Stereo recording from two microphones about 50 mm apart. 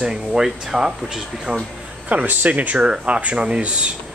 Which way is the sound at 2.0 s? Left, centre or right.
Right.